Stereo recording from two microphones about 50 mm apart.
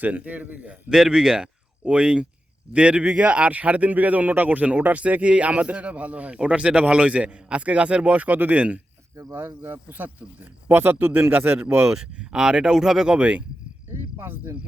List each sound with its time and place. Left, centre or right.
0.0 s a man's voice: right
0.9 s speech: centre; by 8.8 s right
9.3 s speech: right
11.9 s speech: centre
13.1 s speech: right
13.9 s speech: right